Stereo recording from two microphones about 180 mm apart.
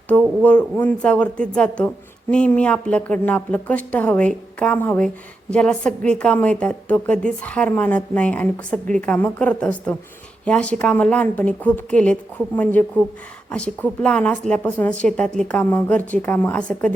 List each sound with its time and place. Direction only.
0.1 s speech: 5° left (ahead or behind)